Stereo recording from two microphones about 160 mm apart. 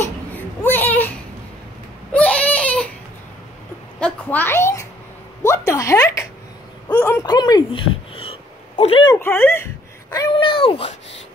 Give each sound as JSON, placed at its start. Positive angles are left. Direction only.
{"t": 0.0, "sound": "baby cry", "side_deg": 10}
{"t": 2.1, "sound": "baby cry", "side_deg": 10}
{"t": 4.0, "sound": "a sound", "side_deg": 10}
{"t": 9.1, "sound": "speech", "side_deg": 15}
{"t": 10.1, "sound": "speech", "side_deg": 30}